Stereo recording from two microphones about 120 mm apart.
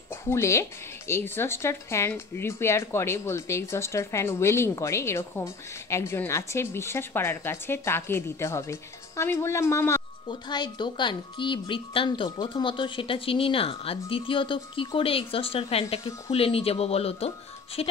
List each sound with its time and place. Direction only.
0.1 s speech: 20° left (ahead or behind)
10.2 s speech: 40° left (ahead or behind); by 17.9 s 55° left (ahead or behind)